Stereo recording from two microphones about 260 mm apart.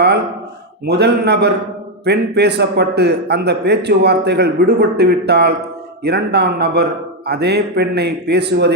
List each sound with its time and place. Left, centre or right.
0.9 s a man's voice: right